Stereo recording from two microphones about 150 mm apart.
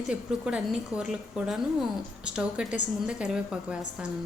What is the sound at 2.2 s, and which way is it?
A woman's voice, 5° right (ahead or behind).